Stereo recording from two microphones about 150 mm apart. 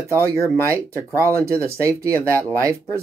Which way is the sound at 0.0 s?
20° right (ahead or behind).